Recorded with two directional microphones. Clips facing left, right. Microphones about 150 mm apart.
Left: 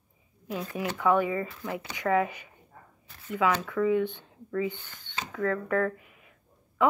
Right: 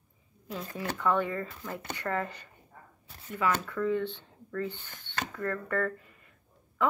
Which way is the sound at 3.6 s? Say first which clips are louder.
Left 4 dB; 10° left (ahead or behind).